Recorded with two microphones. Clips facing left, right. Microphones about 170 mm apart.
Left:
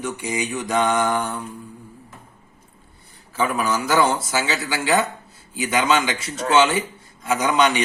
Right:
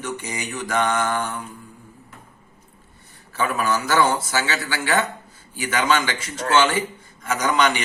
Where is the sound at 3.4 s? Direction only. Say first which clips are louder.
Left 1 dB; 15° left (ahead or behind).